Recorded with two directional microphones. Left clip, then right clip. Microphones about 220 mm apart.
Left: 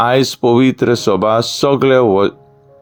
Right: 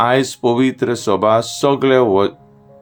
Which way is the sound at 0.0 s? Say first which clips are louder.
Left 2 dB; 25° left (ahead or behind).